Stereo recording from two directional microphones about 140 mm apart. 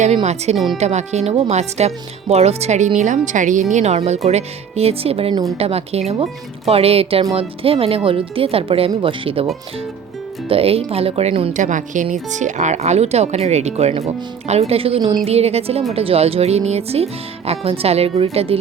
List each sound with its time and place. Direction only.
0.0 s speech: 50° right (ahead or behind)
0.5 s speech: centre (ahead or behind)
0.8 s speech: 55° right (ahead or behind)
10.5 s speech: 45° right (ahead or behind)
11.5 s a woman's voice: 65° right (ahead or behind); by 18.5 s 45° right (ahead or behind)